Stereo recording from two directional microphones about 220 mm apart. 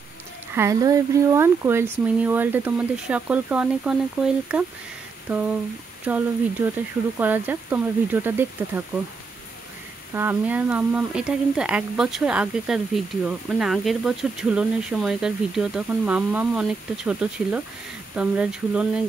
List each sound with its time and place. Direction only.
0.6 s speech: 15° right (ahead or behind)
10.1 s speech: 10° right (ahead or behind)